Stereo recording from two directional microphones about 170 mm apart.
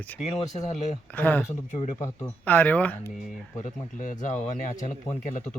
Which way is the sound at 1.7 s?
40° left (ahead or behind).